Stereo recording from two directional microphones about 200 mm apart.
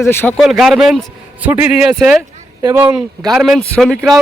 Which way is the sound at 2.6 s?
15° right (ahead or behind).